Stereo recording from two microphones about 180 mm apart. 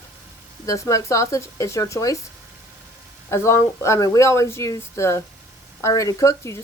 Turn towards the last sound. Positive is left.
turn(degrees=15)  # may be behind; listen again after turning